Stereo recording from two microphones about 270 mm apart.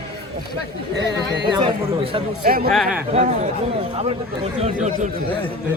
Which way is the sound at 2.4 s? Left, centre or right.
Right.